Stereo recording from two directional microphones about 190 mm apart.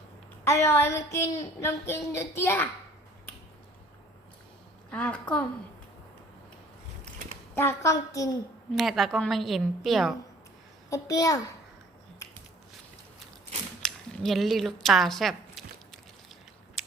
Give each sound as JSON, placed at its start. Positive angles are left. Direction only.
{"t": 0.4, "sound": "a woman's voice", "side_deg": 15}
{"t": 4.9, "sound": "a woman's voice", "side_deg": 5}
{"t": 7.5, "sound": "a woman's voice", "side_deg": 10}
{"t": 8.7, "sound": "a woman's voice", "side_deg": 0}
{"t": 10.8, "sound": "a woman's voice", "side_deg": 15}
{"t": 13.8, "sound": "a sound", "side_deg": 0}
{"t": 16.8, "sound": "mechanisms", "side_deg": 0}